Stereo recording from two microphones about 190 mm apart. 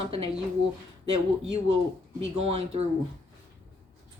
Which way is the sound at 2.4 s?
30° right (ahead or behind).